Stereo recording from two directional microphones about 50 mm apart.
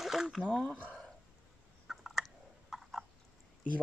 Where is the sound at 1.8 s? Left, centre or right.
Centre.